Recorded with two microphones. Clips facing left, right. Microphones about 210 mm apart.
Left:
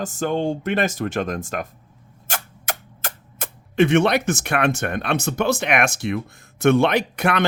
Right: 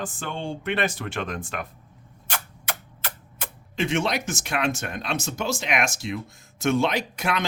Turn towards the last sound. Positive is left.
turn(degrees=60)  # may be behind; listen again after turning